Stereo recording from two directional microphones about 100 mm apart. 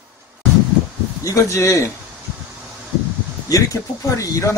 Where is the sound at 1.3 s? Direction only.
30° left (ahead or behind).